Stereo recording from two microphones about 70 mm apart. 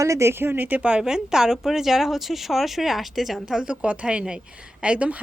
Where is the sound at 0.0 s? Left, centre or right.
Right.